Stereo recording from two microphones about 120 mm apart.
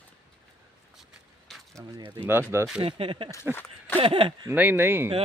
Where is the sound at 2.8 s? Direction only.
50° right (ahead or behind).